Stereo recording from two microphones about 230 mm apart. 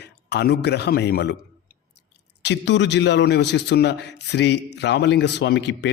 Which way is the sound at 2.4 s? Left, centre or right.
Left.